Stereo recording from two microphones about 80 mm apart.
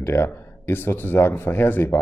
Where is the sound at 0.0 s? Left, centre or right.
Left.